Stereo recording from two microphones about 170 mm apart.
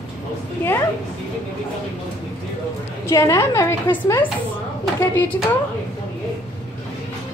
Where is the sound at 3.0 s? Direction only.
20° left (ahead or behind).